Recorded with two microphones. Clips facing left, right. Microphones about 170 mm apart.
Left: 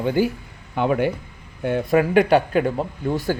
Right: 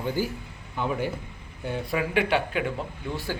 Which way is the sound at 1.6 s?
55° left (ahead or behind).